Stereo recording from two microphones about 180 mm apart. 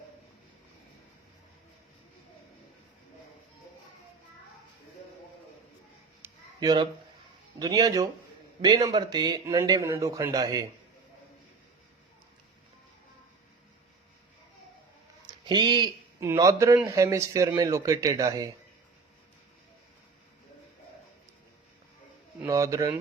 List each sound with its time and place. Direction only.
6.2 s a sound: 20° right (ahead or behind)
7.6 s a man's voice: 20° right (ahead or behind)
15.3 s a man's voice: 25° right (ahead or behind)
22.4 s speech: 15° right (ahead or behind)